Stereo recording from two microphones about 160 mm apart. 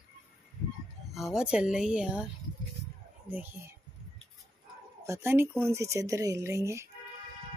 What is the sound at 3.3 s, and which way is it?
Speech, 10° right (ahead or behind).